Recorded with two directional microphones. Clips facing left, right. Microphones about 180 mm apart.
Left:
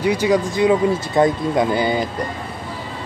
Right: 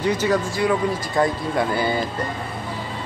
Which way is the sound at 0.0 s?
10° left (ahead or behind).